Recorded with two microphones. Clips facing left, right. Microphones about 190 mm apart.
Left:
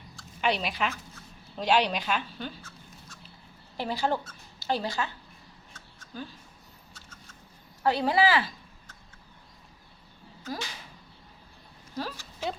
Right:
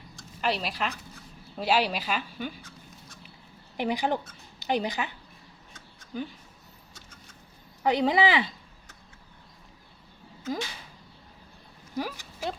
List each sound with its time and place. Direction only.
0.4 s speech: centre (ahead or behind)
2.6 s a sound: 15° right (ahead or behind)
3.8 s speech: 15° right (ahead or behind)
5.7 s a sound: 15° right (ahead or behind)
7.9 s speech: 20° right (ahead or behind)
11.9 s speech: 15° right (ahead or behind)